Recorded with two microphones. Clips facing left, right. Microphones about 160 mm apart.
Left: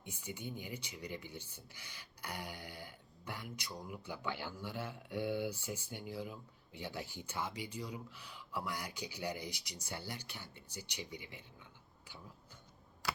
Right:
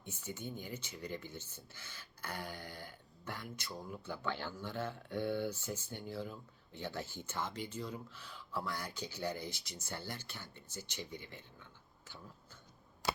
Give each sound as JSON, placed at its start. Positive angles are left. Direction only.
{"t": 0.0, "sound": "speech", "side_deg": 15}
{"t": 13.0, "sound": "typewriter", "side_deg": -20}